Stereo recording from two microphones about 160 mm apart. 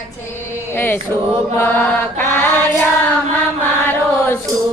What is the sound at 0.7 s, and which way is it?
Choir, 15° left (ahead or behind).